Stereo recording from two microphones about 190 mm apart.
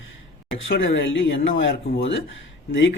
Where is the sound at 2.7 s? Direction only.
85° left.